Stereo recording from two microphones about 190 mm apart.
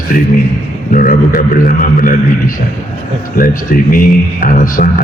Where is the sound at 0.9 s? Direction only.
45° left (ahead or behind).